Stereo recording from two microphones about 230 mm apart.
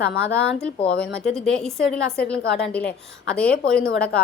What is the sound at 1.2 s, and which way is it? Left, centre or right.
A woman's voice, centre.